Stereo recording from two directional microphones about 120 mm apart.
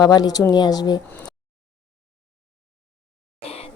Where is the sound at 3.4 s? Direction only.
55° left (ahead or behind).